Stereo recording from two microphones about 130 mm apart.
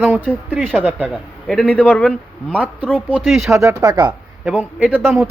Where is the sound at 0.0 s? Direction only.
15° right (ahead or behind).